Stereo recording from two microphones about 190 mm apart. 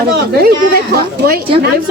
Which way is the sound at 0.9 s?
55° right (ahead or behind).